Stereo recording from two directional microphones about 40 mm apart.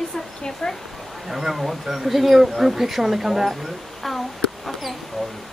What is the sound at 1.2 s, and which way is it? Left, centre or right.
Speech, centre.